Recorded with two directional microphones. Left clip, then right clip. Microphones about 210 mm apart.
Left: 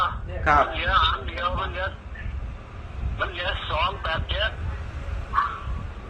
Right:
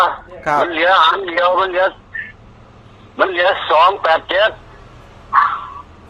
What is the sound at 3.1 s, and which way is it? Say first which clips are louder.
A man's voice: right 14 dB; 50° right (ahead or behind).